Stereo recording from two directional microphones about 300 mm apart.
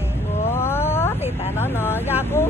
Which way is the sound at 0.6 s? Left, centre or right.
Centre.